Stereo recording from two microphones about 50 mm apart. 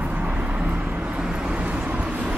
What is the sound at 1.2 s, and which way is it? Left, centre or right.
Vehicle, centre.